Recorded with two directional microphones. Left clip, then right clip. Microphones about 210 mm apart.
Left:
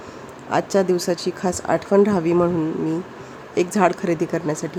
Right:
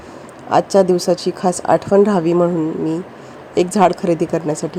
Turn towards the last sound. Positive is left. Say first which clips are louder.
# right 4 dB
turn(degrees=-10)  # may be behind; listen again after turning